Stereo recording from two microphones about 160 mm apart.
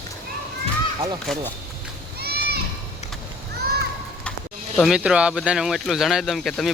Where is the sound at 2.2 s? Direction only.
80° right.